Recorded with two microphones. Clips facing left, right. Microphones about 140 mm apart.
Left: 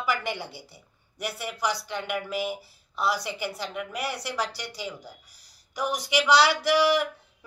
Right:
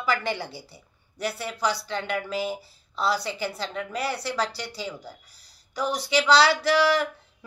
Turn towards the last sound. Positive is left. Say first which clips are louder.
# right 1 dB
turn(degrees=15)  # may be behind; listen again after turning